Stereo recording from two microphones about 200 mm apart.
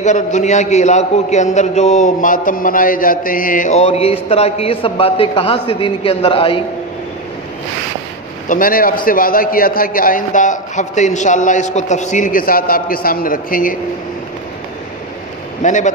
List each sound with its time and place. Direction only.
0.0 s a man's voice: 35° left (ahead or behind)
8.5 s a man's voice: 45° left (ahead or behind)
15.6 s a man's voice: 40° left (ahead or behind)